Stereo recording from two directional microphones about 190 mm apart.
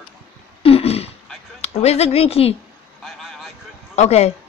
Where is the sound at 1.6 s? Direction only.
35° left (ahead or behind).